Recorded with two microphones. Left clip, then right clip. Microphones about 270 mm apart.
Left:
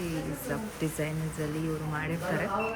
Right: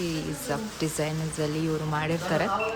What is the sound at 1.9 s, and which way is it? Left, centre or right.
Speech, centre.